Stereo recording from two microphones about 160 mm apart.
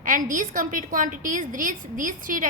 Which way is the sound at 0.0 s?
55° right (ahead or behind).